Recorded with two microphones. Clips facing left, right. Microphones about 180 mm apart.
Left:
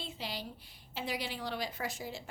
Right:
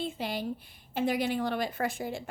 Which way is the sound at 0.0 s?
50° right (ahead or behind).